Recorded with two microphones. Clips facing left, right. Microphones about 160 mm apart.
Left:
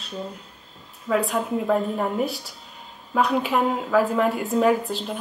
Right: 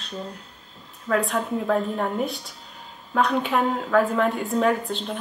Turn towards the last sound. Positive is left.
turn(degrees=5)  # may be behind; listen again after turning